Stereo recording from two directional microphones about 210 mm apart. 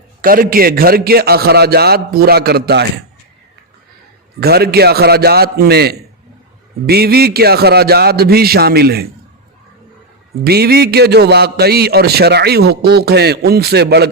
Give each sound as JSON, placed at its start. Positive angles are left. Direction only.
{"t": 0.2, "sound": "a man's voice", "side_deg": -45}
{"t": 4.4, "sound": "a man's voice", "side_deg": -50}
{"t": 10.4, "sound": "a man's voice", "side_deg": -50}